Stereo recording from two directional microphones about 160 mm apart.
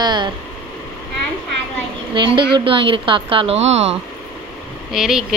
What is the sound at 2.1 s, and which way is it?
A woman's voice, 30° right (ahead or behind).